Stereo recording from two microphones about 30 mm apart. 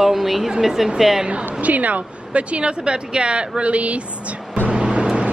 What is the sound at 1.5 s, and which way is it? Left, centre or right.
Speech, right.